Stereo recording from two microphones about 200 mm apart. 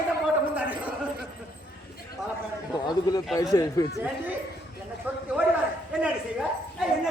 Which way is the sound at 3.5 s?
20° left (ahead or behind).